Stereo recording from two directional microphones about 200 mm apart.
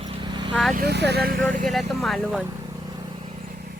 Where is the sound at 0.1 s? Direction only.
25° right (ahead or behind).